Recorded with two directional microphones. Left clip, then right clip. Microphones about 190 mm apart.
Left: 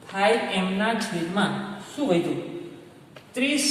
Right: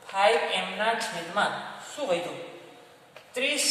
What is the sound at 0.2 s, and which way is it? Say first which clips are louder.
Speech: left 1 dB; 10° right (ahead or behind).